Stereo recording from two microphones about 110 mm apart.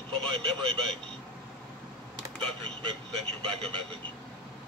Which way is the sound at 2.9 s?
60° right (ahead or behind).